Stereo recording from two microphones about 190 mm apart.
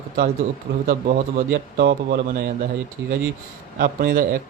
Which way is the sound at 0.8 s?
50° right (ahead or behind).